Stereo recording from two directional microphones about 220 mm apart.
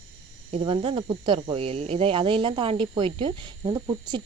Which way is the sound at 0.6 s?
25° right (ahead or behind).